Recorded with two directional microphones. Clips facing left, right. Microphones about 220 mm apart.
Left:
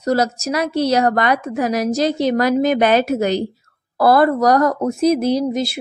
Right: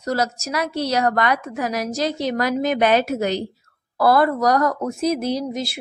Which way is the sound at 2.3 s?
35° left (ahead or behind).